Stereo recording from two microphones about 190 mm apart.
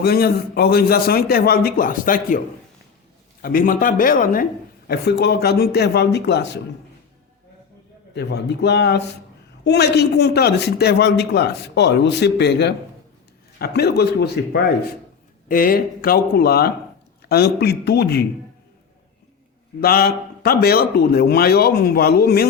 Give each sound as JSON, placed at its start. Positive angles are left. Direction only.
{"t": 0.0, "sound": "a man's voice", "side_deg": 55}
{"t": 3.4, "sound": "a man's voice", "side_deg": 50}
{"t": 4.9, "sound": "speech", "side_deg": 60}
{"t": 8.1, "sound": "speech", "side_deg": 60}
{"t": 15.4, "sound": "a man's voice", "side_deg": 50}
{"t": 19.8, "sound": "speech", "side_deg": 55}